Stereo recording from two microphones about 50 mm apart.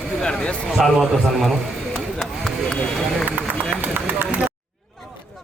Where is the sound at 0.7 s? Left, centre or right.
Centre.